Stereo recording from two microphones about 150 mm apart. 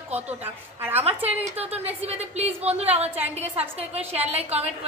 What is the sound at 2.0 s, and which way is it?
A woman's voice, 45° right (ahead or behind).